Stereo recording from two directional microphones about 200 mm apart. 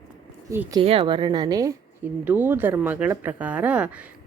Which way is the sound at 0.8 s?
25° right (ahead or behind).